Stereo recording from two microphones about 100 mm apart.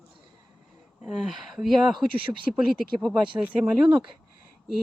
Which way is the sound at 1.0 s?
Centre (ahead or behind).